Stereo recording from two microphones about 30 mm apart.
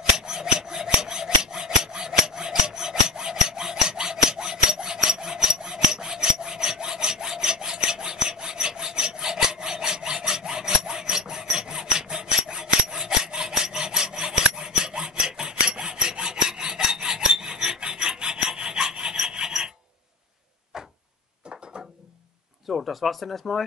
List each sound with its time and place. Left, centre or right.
0.2 s filing: right
12.9 s rub: centre
13.3 s sawing: right
14.5 s rub: right
20.7 s a sound: right
22.7 s speech: centre